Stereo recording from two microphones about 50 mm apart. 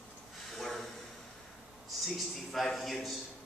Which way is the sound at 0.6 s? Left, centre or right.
Centre.